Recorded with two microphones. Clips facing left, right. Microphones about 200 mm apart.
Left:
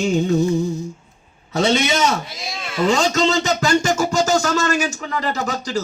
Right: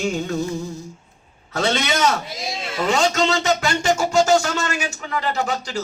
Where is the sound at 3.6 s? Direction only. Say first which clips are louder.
Left 2 dB; 40° left (ahead or behind).